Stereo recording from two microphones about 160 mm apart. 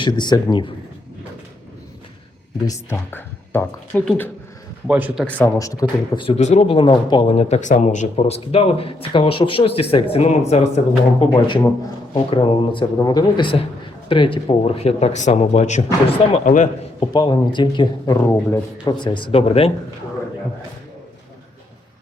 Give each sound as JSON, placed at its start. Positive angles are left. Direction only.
{"t": 0.0, "sound": "speech", "side_deg": 30}
{"t": 2.6, "sound": "speech", "side_deg": 15}
{"t": 4.9, "sound": "speech", "side_deg": -10}
{"t": 5.5, "sound": "speech", "side_deg": 20}
{"t": 6.2, "sound": "speech", "side_deg": 45}
{"t": 17.0, "sound": "speech", "side_deg": 25}